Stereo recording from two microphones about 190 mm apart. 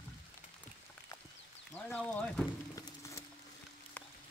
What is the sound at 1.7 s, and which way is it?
Speech, 10° left (ahead or behind).